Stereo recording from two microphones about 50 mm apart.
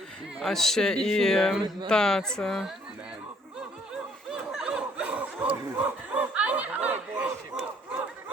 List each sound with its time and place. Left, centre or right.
0.4 s a man's voice: centre
3.9 s snicker: centre
5.0 s snicker: right